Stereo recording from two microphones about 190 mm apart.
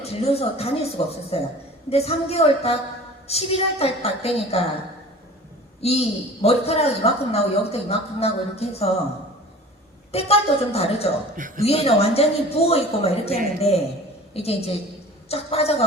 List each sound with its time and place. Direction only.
0.1 s a woman's voice: 30° left (ahead or behind)
5.8 s a woman's voice: 30° left (ahead or behind)
10.1 s a woman's voice: 30° left (ahead or behind)
11.3 s a woman's voice: 45° right (ahead or behind)
11.6 s a woman's voice: 30° left (ahead or behind)